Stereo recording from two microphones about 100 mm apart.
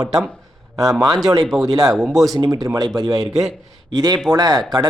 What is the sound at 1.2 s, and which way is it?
Speech, 40° right (ahead or behind).